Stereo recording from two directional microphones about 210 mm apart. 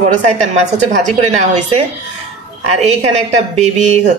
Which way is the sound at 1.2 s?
30° right (ahead or behind).